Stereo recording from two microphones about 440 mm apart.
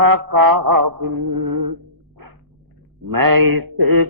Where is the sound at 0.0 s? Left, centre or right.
Right.